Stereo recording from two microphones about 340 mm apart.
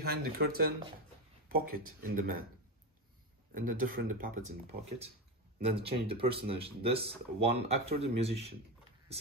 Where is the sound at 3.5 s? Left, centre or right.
Right.